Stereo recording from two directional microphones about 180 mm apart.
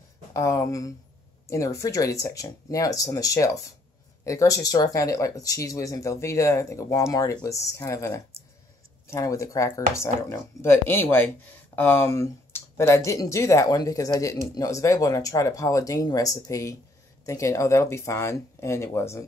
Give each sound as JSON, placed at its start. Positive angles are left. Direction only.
{"t": 0.3, "sound": "speech", "side_deg": 15}